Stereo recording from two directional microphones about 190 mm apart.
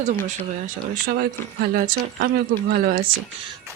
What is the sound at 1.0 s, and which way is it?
Speech, 55° right (ahead or behind).